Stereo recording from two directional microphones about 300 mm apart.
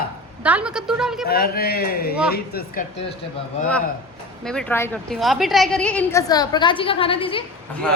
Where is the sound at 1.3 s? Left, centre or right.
Left.